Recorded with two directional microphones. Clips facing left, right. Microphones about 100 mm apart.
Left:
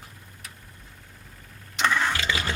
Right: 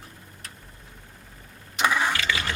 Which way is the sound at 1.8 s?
10° right (ahead or behind).